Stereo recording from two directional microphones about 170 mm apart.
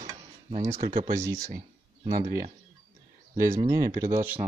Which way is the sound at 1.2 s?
20° right (ahead or behind).